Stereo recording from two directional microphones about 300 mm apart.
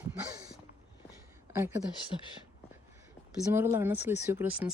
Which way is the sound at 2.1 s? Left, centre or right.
Centre.